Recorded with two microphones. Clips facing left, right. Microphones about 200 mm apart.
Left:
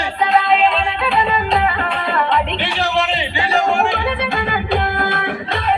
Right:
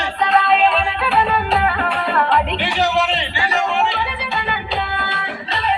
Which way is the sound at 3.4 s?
30° left (ahead or behind).